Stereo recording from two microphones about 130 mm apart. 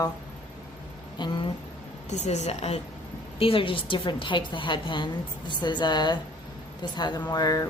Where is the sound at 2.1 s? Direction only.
60° left (ahead or behind); by 7.7 s 30° left (ahead or behind).